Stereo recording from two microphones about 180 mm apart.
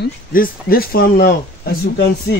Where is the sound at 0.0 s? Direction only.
55° left (ahead or behind).